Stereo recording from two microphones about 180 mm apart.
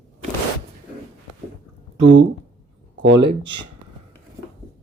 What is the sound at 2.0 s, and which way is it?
Speech, 90° right.